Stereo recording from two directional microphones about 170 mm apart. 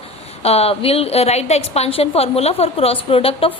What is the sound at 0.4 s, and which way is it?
A woman's voice, 35° left (ahead or behind).